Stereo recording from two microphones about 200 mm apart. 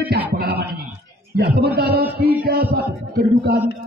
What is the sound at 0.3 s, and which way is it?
Music, 50° right (ahead or behind).